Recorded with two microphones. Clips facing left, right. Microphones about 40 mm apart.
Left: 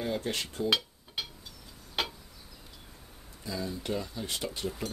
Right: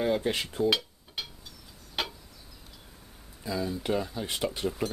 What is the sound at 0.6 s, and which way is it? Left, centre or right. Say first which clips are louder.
Dishes: right 1 dB; centre.